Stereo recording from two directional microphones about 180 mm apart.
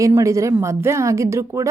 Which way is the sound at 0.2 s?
15° right (ahead or behind).